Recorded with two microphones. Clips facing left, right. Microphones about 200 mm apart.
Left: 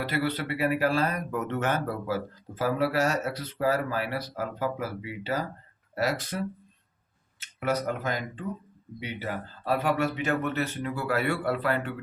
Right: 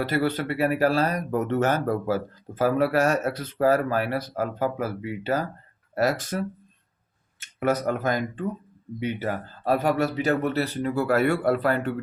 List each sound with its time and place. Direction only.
0.0 s speech: 45° right (ahead or behind)